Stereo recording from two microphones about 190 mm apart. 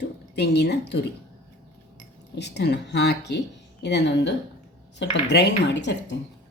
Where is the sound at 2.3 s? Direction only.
65° left (ahead or behind).